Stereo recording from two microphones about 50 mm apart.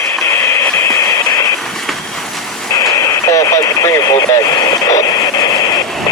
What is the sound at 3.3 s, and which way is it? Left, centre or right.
Vehicle, left.